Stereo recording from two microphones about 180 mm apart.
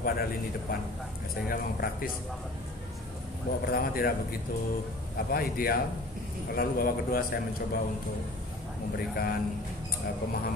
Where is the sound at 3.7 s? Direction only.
55° left (ahead or behind).